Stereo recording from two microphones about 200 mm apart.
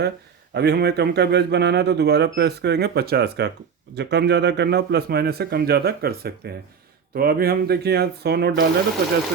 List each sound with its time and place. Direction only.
0.5 s a man's voice: 55° right (ahead or behind)